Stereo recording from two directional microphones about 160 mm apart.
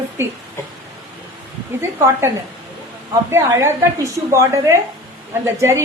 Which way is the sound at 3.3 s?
15° right (ahead or behind).